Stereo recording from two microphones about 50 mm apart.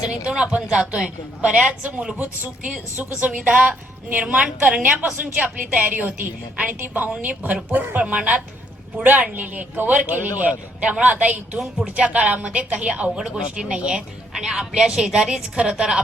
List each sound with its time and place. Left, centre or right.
0.1 s a woman's voice: centre
2.1 s speech: right
2.9 s a woman's voice: right; by 16.0 s centre